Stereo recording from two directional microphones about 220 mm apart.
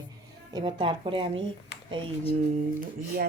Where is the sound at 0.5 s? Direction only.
20° right (ahead or behind).